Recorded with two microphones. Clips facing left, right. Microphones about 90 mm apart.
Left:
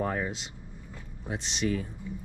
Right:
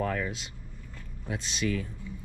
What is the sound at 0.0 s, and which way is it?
Speech, 25° left (ahead or behind).